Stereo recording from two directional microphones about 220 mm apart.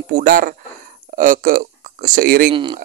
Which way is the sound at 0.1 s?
35° right (ahead or behind).